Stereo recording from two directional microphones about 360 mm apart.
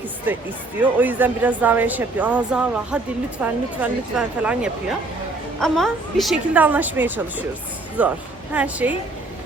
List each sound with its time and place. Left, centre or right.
0.8 s speech: centre